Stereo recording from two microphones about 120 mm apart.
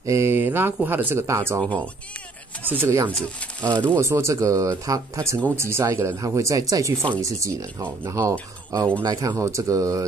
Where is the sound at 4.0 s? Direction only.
25° right (ahead or behind).